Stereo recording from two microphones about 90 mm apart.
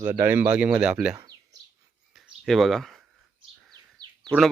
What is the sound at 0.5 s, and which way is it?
Speech, 10° right (ahead or behind).